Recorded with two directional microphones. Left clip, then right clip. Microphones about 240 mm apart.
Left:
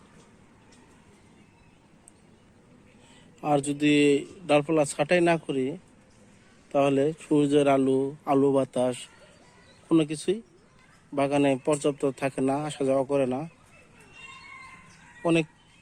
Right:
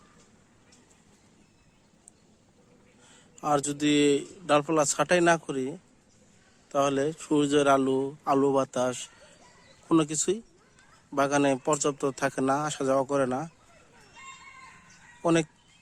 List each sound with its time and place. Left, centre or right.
3.4 s a man's voice: centre
6.7 s a man's voice: centre
15.2 s speech: right